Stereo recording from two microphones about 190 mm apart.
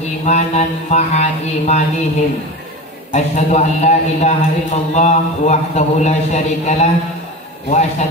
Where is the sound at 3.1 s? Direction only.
35° left (ahead or behind).